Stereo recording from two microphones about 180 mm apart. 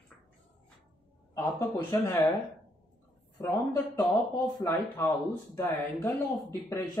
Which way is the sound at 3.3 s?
15° left (ahead or behind).